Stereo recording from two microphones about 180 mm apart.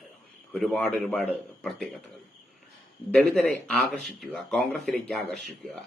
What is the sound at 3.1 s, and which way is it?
Speech, 5° left (ahead or behind).